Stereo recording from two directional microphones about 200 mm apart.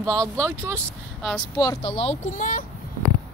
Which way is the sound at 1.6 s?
20° left (ahead or behind).